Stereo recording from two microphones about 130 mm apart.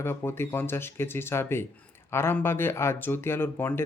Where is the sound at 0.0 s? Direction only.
15° left (ahead or behind).